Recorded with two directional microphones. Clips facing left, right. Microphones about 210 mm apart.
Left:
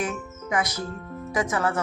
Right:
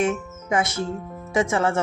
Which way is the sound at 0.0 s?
25° right (ahead or behind).